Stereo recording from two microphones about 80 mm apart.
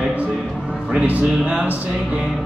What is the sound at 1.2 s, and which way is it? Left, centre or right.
Speech, centre.